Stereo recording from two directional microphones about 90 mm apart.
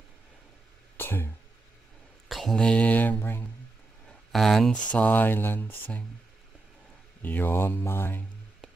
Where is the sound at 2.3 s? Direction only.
Centre (ahead or behind).